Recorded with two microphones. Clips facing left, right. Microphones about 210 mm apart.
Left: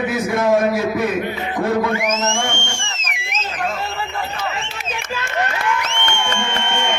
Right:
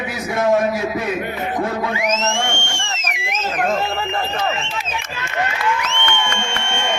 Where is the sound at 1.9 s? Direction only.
50° left (ahead or behind).